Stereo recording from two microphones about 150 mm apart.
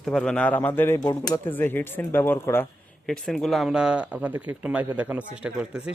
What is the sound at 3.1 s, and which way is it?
Speech, 5° left (ahead or behind).